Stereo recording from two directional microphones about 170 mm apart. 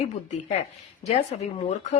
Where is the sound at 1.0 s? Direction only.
40° left (ahead or behind).